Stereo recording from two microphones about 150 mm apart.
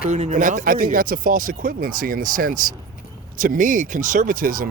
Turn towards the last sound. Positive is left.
turn(degrees=-65)  # may be behind; listen again after turning